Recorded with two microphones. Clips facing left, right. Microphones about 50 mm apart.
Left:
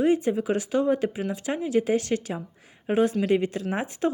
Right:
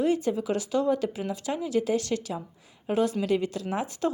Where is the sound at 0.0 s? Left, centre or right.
Left.